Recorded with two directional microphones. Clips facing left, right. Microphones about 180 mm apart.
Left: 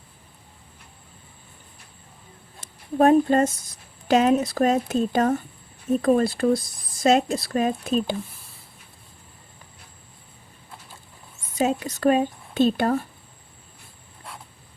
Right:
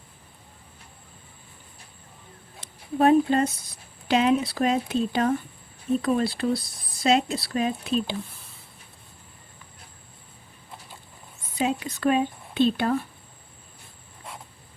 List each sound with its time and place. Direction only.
2.6 s speech: 45° left (ahead or behind)
11.5 s speech: 45° left (ahead or behind)